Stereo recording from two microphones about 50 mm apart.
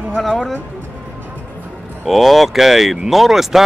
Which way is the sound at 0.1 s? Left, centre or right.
Centre.